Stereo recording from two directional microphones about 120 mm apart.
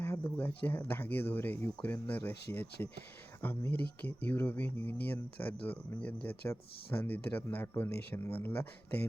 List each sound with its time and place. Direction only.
0.0 s speech: 15° left (ahead or behind)